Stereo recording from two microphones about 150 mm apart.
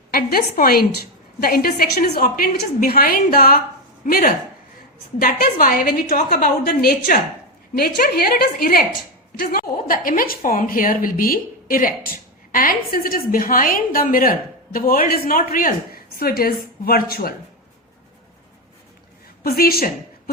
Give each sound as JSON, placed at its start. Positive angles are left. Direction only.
{"t": 0.1, "sound": "a woman's voice", "side_deg": 80}
{"t": 3.2, "sound": "a woman's voice", "side_deg": 75}
{"t": 7.8, "sound": "a woman's voice", "side_deg": 80}
{"t": 19.4, "sound": "a woman's voice", "side_deg": 85}